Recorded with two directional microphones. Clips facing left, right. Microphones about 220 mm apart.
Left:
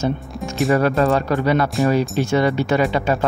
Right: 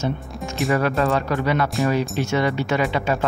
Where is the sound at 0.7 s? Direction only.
35° left (ahead or behind).